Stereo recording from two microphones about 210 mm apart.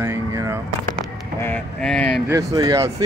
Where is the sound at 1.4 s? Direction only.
5° left (ahead or behind).